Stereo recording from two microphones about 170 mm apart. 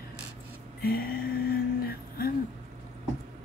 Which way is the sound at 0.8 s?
65° left (ahead or behind).